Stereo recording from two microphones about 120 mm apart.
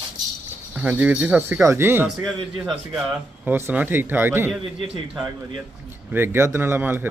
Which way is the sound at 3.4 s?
15° right (ahead or behind).